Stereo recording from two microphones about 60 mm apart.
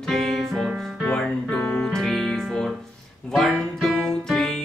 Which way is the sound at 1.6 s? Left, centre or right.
Left.